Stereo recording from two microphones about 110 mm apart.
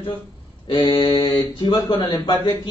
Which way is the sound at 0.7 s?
50° left (ahead or behind).